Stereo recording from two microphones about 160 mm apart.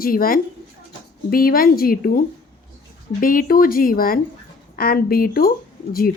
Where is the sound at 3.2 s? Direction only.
60° left (ahead or behind).